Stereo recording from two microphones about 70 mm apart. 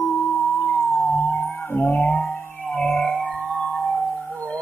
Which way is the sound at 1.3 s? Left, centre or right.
Left.